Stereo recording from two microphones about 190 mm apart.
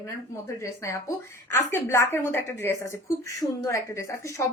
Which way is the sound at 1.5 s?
15° left (ahead or behind).